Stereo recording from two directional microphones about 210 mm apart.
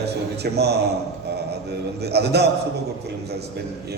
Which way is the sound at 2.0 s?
50° right (ahead or behind).